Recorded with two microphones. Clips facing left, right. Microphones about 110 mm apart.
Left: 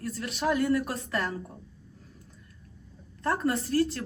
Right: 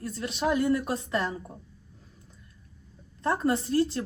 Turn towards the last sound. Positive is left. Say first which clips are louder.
# right 1 dB
turn(degrees=-25)  # may be behind; listen again after turning